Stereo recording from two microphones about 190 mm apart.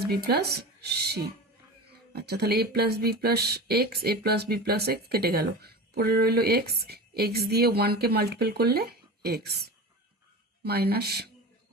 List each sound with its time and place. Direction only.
0.1 s speech: 55° right (ahead or behind)